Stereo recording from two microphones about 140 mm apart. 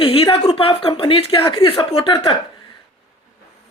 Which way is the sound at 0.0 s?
40° left (ahead or behind).